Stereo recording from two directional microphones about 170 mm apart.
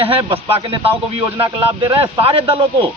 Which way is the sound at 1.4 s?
30° right (ahead or behind).